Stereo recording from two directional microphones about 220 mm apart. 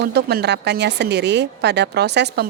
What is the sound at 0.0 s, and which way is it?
Speech, 50° right (ahead or behind).